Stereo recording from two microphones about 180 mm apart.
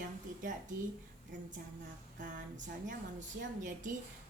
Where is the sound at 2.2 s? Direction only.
45° right (ahead or behind).